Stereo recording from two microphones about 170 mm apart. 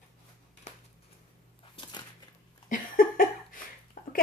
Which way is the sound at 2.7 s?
55° left (ahead or behind).